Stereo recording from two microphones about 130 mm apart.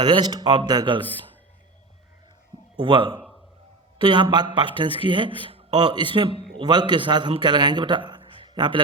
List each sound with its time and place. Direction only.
0.0 s speech: 35° right (ahead or behind)
2.7 s speech: 40° right (ahead or behind)